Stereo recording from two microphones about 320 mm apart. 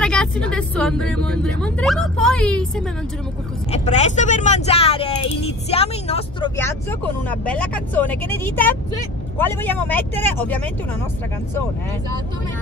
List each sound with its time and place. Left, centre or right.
0.0 s speech: centre
3.7 s speech: left; by 10.7 s centre